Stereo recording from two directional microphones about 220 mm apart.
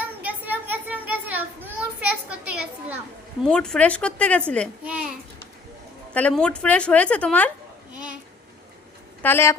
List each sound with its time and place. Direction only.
0.0 s children playing: 10° right (ahead or behind)
3.4 s a woman's voice: 5° left (ahead or behind)
4.8 s babbling: 5° right (ahead or behind)
6.1 s a woman's voice: 5° left (ahead or behind)
9.2 s speech: 10° left (ahead or behind)